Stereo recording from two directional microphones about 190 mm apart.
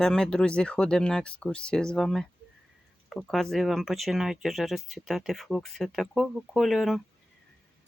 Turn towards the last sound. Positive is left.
turn(degrees=0)  # may be behind; listen again after turning